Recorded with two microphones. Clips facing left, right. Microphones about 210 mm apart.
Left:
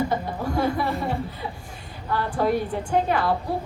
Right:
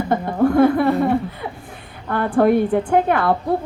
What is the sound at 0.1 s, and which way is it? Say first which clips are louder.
A woman's voice: right 9 dB; 55° right (ahead or behind).